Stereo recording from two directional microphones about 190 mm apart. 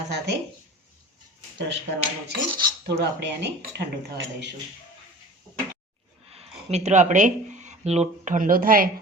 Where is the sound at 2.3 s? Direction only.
60° right (ahead or behind).